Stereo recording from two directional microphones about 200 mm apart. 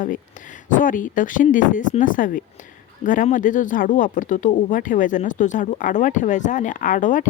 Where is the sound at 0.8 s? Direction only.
40° left (ahead or behind).